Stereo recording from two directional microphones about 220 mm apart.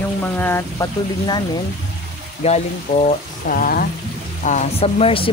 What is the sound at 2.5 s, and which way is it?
Speech, 30° left (ahead or behind).